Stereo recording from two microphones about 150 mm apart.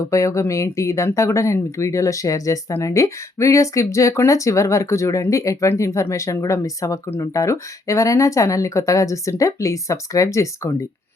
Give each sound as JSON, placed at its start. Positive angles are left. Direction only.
{"t": 0.0, "sound": "speech", "side_deg": 20}